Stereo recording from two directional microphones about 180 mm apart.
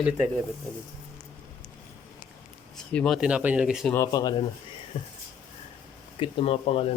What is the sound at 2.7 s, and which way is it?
Speech, 5° left (ahead or behind).